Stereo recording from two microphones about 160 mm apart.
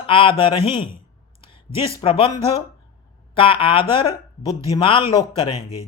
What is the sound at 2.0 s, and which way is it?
Speech, 35° left (ahead or behind).